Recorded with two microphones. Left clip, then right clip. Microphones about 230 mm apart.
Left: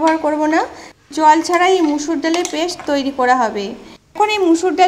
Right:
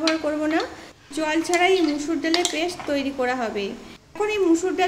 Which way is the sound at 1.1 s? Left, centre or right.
Centre.